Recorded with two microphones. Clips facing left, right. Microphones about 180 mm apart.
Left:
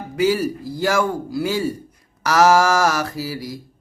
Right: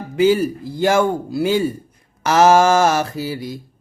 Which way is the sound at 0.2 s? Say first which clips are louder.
Right 4 dB; 25° right (ahead or behind).